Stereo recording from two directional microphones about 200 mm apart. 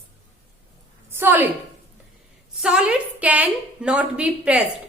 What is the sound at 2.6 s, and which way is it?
A woman's voice, 5° right (ahead or behind).